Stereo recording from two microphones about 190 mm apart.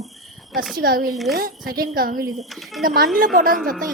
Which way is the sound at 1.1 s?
Centre (ahead or behind).